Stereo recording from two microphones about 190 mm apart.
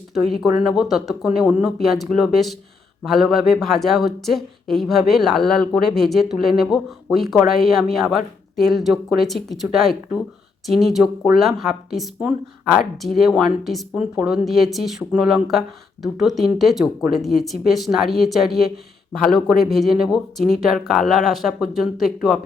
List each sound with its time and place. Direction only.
0.1 s speech: centre (ahead or behind)